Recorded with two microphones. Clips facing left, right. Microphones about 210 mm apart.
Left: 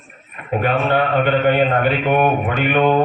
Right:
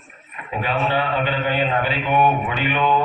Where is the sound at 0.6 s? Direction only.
55° left (ahead or behind).